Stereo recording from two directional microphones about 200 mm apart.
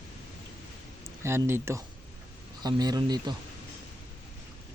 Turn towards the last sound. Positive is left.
turn(degrees=-20)  # may be behind; listen again after turning